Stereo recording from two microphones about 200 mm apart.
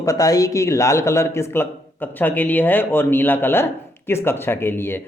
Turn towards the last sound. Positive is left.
turn(degrees=10)  # may be behind; listen again after turning